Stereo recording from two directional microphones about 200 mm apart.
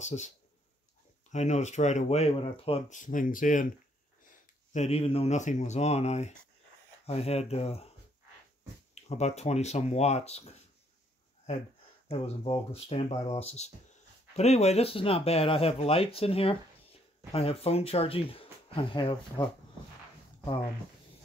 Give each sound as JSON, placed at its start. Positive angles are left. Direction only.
{"t": 0.0, "sound": "speech", "side_deg": 35}
{"t": 1.3, "sound": "speech", "side_deg": 35}
{"t": 4.7, "sound": "speech", "side_deg": 30}
{"t": 8.9, "sound": "speech", "side_deg": 35}
{"t": 12.1, "sound": "speech", "side_deg": 30}